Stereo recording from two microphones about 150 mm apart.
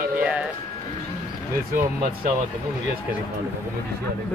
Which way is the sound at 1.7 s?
70° right (ahead or behind).